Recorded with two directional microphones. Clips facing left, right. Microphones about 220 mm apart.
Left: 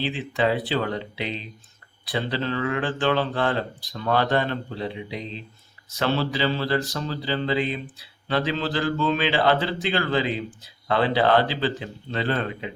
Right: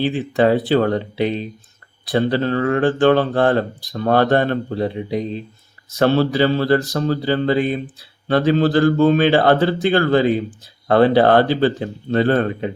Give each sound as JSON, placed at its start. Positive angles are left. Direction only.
{"t": 0.0, "sound": "speech", "side_deg": -50}